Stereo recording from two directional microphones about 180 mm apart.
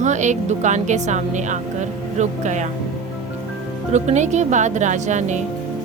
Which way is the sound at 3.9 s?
40° right (ahead or behind).